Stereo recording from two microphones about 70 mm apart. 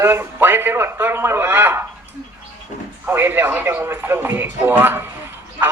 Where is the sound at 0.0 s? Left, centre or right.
Right.